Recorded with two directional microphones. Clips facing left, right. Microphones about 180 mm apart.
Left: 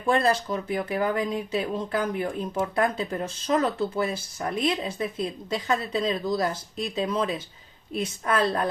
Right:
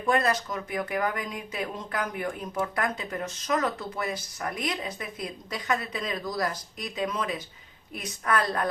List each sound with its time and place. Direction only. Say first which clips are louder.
0.0 s speech: left 2 dB; 30° left (ahead or behind)